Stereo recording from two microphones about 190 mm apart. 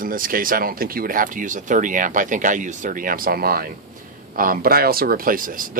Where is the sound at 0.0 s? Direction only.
45° right (ahead or behind).